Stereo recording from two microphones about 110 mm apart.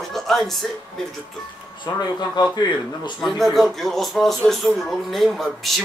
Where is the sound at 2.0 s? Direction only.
40° left (ahead or behind).